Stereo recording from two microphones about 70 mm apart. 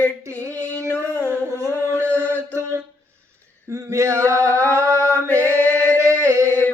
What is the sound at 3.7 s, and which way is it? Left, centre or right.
Male singing, right.